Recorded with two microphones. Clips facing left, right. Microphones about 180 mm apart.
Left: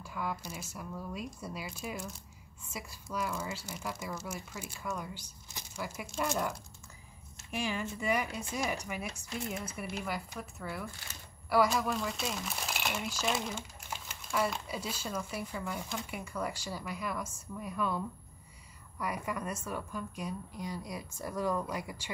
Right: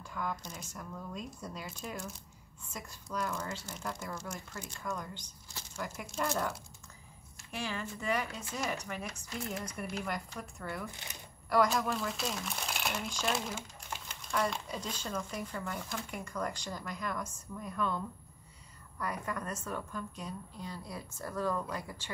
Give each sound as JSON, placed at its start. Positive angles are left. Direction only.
{"t": 0.0, "sound": "speech", "side_deg": 5}
{"t": 7.5, "sound": "speech", "side_deg": 15}
{"t": 10.9, "sound": "speech", "side_deg": -20}
{"t": 11.4, "sound": "speech", "side_deg": 5}